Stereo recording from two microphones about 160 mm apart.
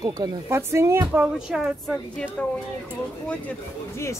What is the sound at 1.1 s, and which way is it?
Speech, 5° right (ahead or behind).